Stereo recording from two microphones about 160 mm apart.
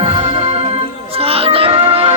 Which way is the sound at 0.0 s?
35° right (ahead or behind).